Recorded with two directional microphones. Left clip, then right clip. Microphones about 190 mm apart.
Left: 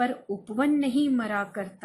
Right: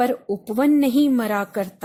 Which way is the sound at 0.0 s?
50° right (ahead or behind).